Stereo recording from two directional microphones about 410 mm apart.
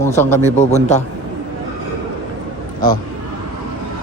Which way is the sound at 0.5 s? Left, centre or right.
Centre.